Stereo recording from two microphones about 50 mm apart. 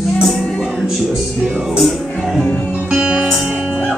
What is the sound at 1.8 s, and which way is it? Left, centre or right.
Music, centre.